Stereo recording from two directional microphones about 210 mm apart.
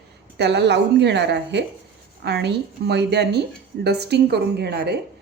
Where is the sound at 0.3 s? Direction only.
55° right (ahead or behind).